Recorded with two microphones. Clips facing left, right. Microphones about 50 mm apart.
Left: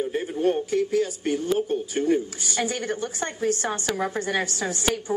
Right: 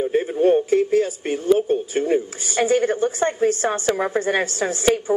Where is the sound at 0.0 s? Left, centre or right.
Right.